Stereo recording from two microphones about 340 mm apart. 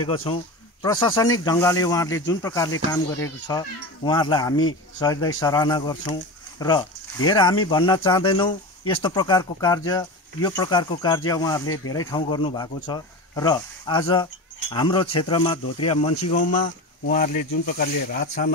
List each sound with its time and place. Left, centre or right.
0.0 s speech: centre